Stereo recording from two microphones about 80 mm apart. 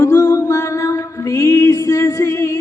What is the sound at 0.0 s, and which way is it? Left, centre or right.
Music, left.